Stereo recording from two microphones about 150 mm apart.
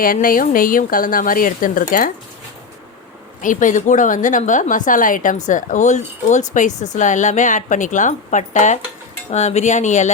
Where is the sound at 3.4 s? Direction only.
60° left (ahead or behind).